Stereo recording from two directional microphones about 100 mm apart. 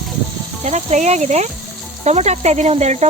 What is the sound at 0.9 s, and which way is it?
Speech, 90° right.